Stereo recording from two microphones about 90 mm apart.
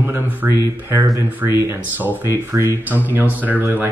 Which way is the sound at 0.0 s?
25° right (ahead or behind).